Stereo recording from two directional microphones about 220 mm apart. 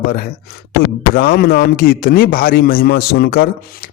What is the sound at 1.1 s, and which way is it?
Speech, 45° left (ahead or behind).